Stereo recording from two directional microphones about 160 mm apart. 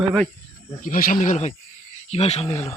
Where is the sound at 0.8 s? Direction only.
60° left (ahead or behind).